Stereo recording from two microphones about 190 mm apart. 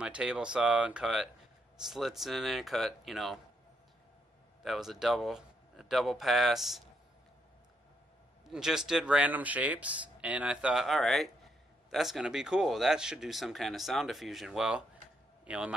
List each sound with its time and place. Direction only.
0.0 s speech: 5° right (ahead or behind)
4.6 s speech: centre (ahead or behind)
8.5 s a man's voice: 5° right (ahead or behind)